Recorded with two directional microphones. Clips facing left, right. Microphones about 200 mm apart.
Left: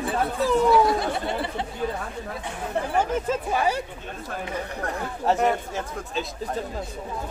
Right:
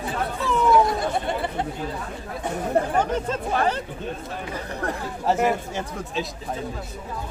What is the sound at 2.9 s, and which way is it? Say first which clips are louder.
Speech: even; 10° left (ahead or behind).